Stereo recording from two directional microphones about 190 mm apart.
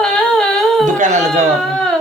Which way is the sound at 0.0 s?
5° left (ahead or behind).